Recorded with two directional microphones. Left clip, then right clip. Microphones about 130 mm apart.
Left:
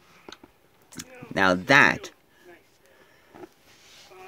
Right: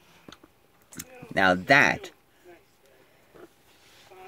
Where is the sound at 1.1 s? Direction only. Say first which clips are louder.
Even; 30° left (ahead or behind).